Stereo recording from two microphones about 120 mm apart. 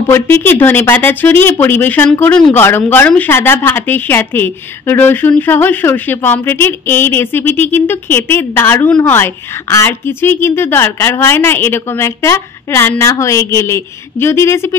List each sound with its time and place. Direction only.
0.1 s a woman's voice: 15° left (ahead or behind)